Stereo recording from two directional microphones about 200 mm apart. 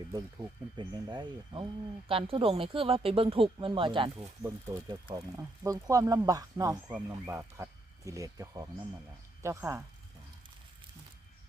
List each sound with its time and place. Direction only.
0.8 s speech: 20° right (ahead or behind)
4.4 s speech: 15° right (ahead or behind)